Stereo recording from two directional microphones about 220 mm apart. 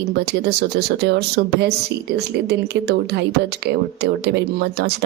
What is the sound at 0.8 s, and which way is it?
Speech, 50° right (ahead or behind).